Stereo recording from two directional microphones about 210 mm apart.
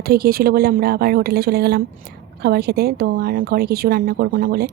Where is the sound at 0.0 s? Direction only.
45° right (ahead or behind).